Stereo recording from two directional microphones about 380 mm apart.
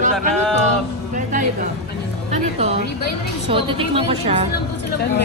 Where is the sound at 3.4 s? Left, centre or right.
Centre.